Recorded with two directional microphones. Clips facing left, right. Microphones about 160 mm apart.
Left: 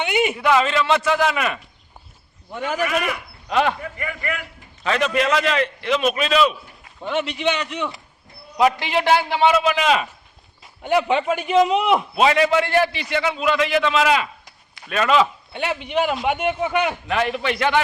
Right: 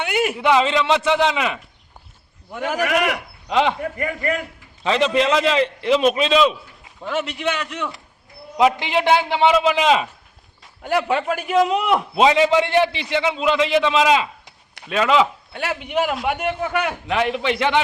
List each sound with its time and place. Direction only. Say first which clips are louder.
0.0 s a sound: left 1 dB; centre (ahead or behind)
0.4 s a man's voice: right 2 dB; 20° right (ahead or behind)
2.8 s speech: right 4 dB; 75° right (ahead or behind)
3.5 s a man's voice: right 1 dB; 15° right (ahead or behind)
3.8 s speech: right 5 dB; 45° right (ahead or behind)
4.8 s a man's voice: right 2 dB; 25° right (ahead or behind)
7.0 s speech: left 1 dB; centre (ahead or behind)
8.5 s a man's voice: right 1 dB; 15° right (ahead or behind)
10.6 s speech: left 2 dB; centre (ahead or behind)
12.1 s a man's voice: right 4 dB; 20° right (ahead or behind); by 16.7 s 5° left (ahead or behind)
17.1 s a man's voice: right 1 dB; 15° right (ahead or behind)